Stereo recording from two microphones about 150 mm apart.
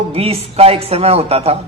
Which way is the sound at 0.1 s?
40° right (ahead or behind).